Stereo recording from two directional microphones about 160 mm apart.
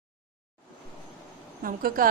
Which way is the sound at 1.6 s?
65° right (ahead or behind).